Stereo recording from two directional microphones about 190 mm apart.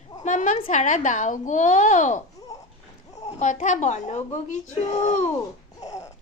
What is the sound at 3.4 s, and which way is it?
Speech, 40° left (ahead or behind).